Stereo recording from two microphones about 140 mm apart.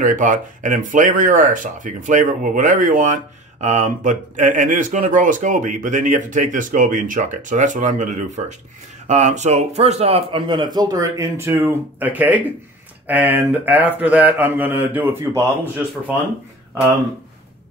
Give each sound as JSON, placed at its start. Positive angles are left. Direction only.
{"t": 0.0, "sound": "speech", "side_deg": -65}
{"t": 3.6, "sound": "speech", "side_deg": -60}